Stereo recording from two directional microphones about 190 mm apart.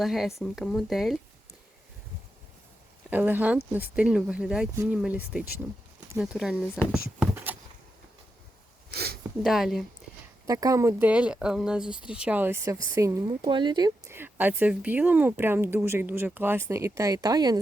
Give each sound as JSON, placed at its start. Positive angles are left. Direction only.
{"t": 0.0, "sound": "speech", "side_deg": 0}
{"t": 3.1, "sound": "speech", "side_deg": -10}
{"t": 4.7, "sound": "speech", "side_deg": -15}
{"t": 7.2, "sound": "a sound", "side_deg": -10}
{"t": 8.9, "sound": "a sound", "side_deg": -55}
{"t": 9.4, "sound": "speech", "side_deg": 0}
{"t": 10.4, "sound": "speech", "side_deg": -15}